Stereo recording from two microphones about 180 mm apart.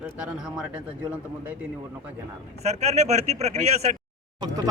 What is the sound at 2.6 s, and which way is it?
A man's voice, 35° right (ahead or behind).